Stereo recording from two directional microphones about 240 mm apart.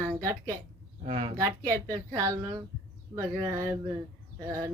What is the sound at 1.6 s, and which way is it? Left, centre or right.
A woman's voice, centre.